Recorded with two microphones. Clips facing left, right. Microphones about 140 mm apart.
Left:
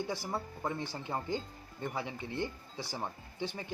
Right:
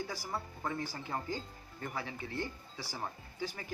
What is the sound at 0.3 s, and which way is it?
Speech, 25° left (ahead or behind).